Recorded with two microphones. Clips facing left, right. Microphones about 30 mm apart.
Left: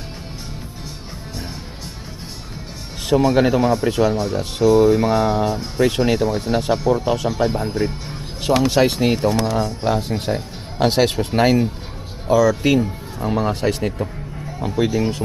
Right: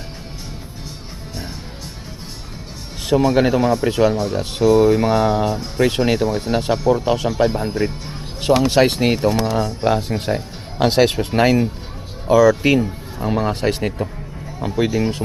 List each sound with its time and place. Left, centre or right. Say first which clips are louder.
3.1 s speech: even; centre